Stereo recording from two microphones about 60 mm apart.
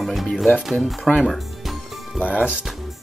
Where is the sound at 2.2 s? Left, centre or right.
Left.